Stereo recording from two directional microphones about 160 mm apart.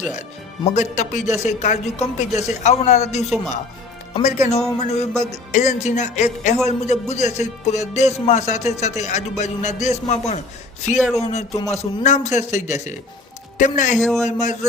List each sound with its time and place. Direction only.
0.2 s speech: 45° left (ahead or behind)
3.2 s a man's voice: centre (ahead or behind)
4.1 s speech: 45° left (ahead or behind)
14.0 s a man's voice: 5° left (ahead or behind)
14.3 s speech: 50° left (ahead or behind)